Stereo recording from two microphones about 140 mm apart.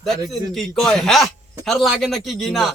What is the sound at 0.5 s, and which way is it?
A man's voice, centre (ahead or behind).